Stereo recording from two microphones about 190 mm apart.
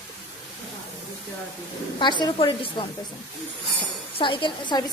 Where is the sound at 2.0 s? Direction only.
25° left (ahead or behind).